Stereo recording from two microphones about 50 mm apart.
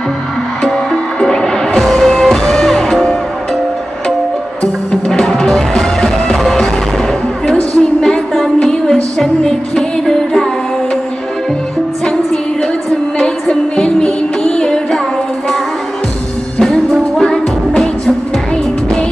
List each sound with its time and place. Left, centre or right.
1.2 s music: centre
5.0 s music: centre
5.3 s music: centre
7.7 s a sound: centre
8.5 s music: centre
13.2 s music: centre
16.5 s music: centre